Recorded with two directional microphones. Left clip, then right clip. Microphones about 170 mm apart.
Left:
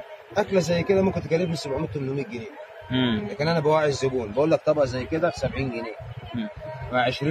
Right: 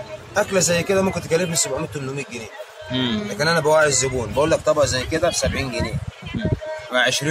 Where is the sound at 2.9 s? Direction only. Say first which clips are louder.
Right 2 dB; 15° right (ahead or behind).